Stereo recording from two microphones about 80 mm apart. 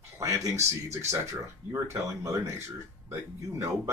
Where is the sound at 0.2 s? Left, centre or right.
Right.